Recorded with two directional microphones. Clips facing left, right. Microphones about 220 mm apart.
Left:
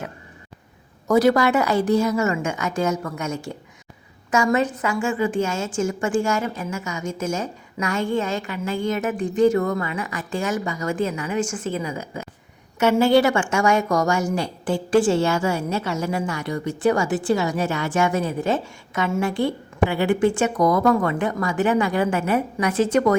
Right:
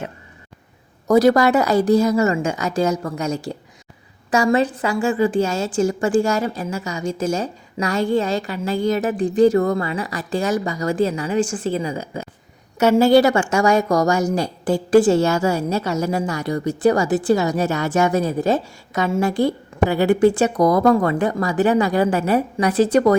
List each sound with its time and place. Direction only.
1.0 s a woman's voice: 40° right (ahead or behind)